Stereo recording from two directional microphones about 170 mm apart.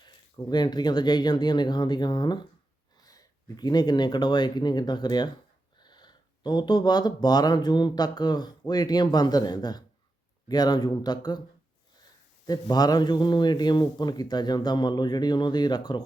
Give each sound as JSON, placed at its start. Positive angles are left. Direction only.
{"t": 0.0, "sound": "speech", "side_deg": 25}
{"t": 12.5, "sound": "speech", "side_deg": 25}